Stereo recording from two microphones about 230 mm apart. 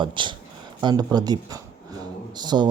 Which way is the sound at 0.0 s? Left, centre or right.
Right.